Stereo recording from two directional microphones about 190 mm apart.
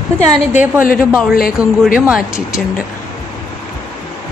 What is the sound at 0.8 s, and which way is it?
Speech, 50° left (ahead or behind).